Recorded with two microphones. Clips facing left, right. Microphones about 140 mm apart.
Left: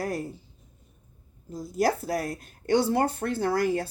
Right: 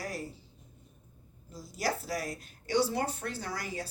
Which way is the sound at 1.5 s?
50° left (ahead or behind).